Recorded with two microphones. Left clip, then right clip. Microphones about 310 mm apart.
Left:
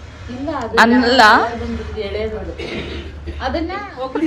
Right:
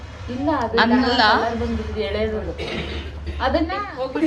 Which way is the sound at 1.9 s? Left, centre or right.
Right.